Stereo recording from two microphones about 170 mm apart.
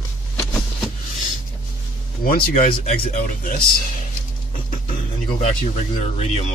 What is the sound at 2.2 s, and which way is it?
Speech, 50° left (ahead or behind).